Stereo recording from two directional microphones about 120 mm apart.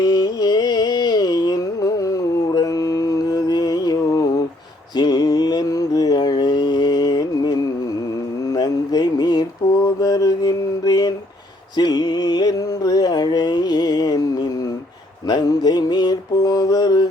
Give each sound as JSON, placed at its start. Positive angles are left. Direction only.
{"t": 0.0, "sound": "carnatic music", "side_deg": 35}
{"t": 4.9, "sound": "mantra", "side_deg": 35}
{"t": 11.8, "sound": "music", "side_deg": 35}
{"t": 15.3, "sound": "mantra", "side_deg": 35}